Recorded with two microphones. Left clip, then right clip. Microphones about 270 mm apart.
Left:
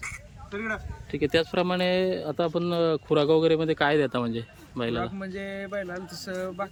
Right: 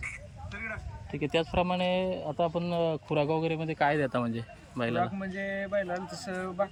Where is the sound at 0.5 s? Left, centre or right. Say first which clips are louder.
Left 7 dB; left.